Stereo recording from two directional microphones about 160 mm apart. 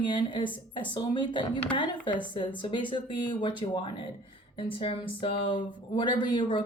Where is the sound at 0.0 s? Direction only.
30° left (ahead or behind).